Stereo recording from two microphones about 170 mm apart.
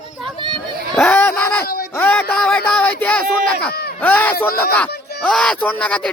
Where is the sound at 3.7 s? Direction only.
70° left (ahead or behind).